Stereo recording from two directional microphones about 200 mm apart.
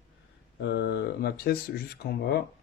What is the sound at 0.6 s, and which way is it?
Speech, 60° left (ahead or behind).